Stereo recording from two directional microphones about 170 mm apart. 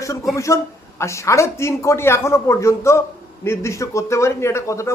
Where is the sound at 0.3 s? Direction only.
15° left (ahead or behind).